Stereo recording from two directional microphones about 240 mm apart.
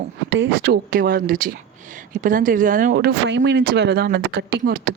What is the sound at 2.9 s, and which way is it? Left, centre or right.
A woman's voice, right.